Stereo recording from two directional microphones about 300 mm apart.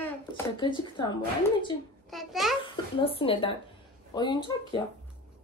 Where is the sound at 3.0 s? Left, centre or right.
Centre.